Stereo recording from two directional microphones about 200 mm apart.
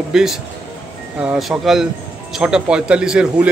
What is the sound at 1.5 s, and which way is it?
Speech, centre (ahead or behind).